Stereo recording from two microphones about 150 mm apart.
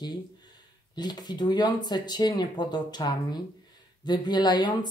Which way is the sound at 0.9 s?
30° left (ahead or behind).